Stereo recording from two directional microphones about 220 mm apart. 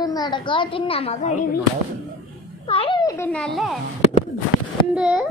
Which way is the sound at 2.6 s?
25° left (ahead or behind).